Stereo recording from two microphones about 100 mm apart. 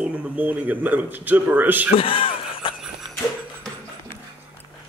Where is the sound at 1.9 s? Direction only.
60° left (ahead or behind).